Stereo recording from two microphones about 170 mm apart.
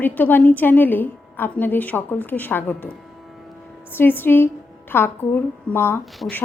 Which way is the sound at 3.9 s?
10° left (ahead or behind).